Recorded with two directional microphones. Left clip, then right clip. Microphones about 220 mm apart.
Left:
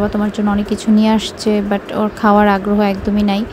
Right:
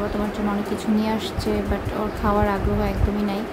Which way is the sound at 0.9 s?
30° left (ahead or behind).